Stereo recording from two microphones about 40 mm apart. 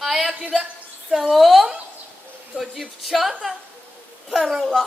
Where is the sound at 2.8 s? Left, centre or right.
Centre.